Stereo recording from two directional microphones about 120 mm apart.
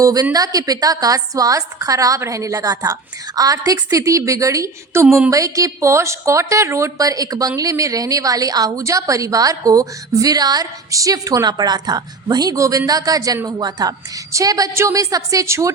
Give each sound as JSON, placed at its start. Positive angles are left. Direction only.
{"t": 0.0, "sound": "a woman's voice", "side_deg": -30}
{"t": 5.0, "sound": "speech", "side_deg": 0}
{"t": 5.3, "sound": "a woman's voice", "side_deg": -30}